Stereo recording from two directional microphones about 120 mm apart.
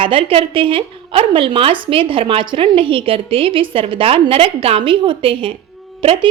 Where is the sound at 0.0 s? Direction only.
45° right (ahead or behind).